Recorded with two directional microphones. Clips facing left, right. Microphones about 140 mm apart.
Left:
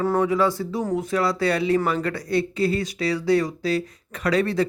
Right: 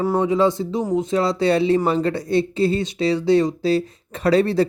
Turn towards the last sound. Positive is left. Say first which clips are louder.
# right 5 dB
turn(degrees=-30)  # may be behind; listen again after turning